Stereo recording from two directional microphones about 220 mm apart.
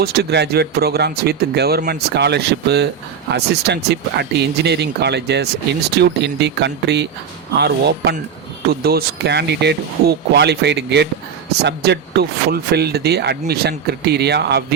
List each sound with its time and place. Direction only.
0.0 s speech: 45° right (ahead or behind)